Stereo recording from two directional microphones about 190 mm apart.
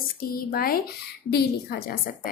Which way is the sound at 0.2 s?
50° left (ahead or behind).